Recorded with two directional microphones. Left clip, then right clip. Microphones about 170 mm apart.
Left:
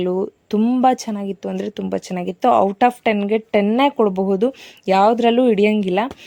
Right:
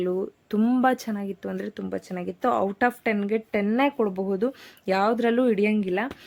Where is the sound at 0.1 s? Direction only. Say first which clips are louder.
Left 7 dB; 20° left (ahead or behind).